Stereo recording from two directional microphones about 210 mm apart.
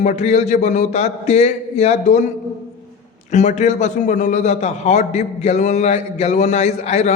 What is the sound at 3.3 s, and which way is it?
A man's voice, 35° left (ahead or behind).